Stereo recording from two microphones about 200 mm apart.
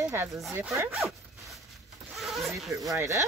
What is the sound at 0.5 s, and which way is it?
Speech, 10° right (ahead or behind).